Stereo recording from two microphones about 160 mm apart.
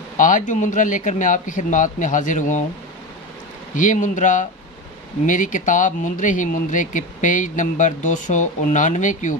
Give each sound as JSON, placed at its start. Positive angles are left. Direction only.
{"t": 0.2, "sound": "speech", "side_deg": 55}
{"t": 3.7, "sound": "speech", "side_deg": 55}